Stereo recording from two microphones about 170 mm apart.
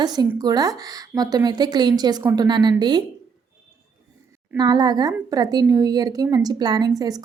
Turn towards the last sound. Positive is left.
turn(degrees=-25)  # may be behind; listen again after turning